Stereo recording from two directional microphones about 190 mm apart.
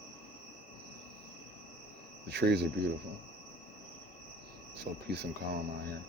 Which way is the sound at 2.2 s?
60° right (ahead or behind).